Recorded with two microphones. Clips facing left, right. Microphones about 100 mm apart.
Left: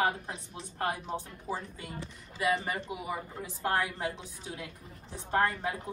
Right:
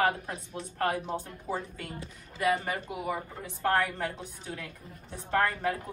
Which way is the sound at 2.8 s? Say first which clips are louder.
Right 3 dB; 50° right (ahead or behind).